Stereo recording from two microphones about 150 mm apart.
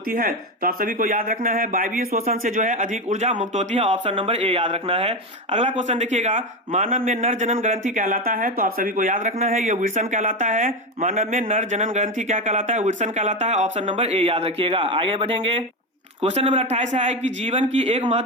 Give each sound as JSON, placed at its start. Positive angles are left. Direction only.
{"t": 0.1, "sound": "speech", "side_deg": -65}
{"t": 13.8, "sound": "a man's voice", "side_deg": -40}